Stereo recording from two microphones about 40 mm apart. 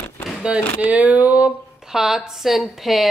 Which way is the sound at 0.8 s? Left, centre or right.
Right.